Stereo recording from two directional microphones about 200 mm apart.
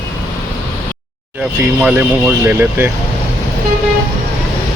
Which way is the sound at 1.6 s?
5° right (ahead or behind).